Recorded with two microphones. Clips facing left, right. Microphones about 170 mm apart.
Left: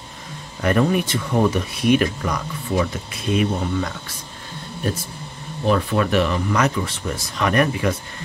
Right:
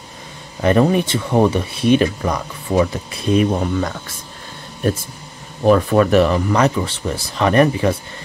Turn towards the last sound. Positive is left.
turn(degrees=-30)  # may be behind; listen again after turning